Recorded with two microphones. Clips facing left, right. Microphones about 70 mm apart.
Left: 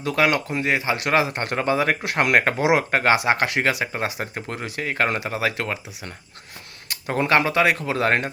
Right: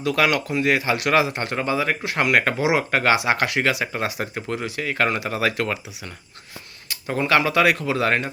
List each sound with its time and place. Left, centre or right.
0.0 s speech: left
1.3 s speech: left
2.3 s speech: left
2.6 s speech: left
2.9 s speech: left
5.4 s speech: centre
7.1 s speech: left